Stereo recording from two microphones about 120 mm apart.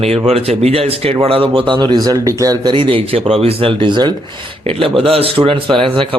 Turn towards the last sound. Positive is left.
turn(degrees=-45)  # may be behind; listen again after turning